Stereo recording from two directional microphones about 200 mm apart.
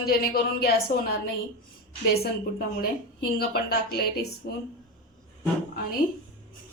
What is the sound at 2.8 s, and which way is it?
A woman's voice, 50° left (ahead or behind).